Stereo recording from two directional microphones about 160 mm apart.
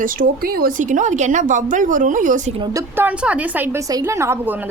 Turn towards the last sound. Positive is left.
turn(degrees=-15)  # may be behind; listen again after turning